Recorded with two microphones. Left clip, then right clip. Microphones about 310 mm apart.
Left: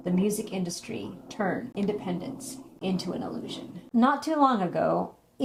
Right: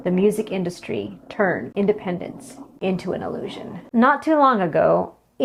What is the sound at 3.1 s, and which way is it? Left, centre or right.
Speech, right.